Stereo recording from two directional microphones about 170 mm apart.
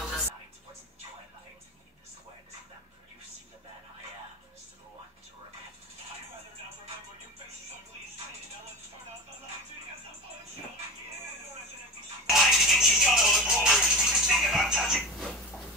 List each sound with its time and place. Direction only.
12.3 s music: centre (ahead or behind)